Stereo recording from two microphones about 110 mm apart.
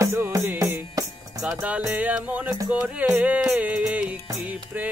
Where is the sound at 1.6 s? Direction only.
15° right (ahead or behind).